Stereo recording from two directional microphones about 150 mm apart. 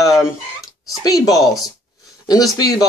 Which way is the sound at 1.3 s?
Centre (ahead or behind).